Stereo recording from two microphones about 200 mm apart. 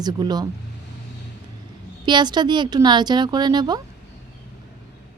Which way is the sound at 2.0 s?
20° right (ahead or behind).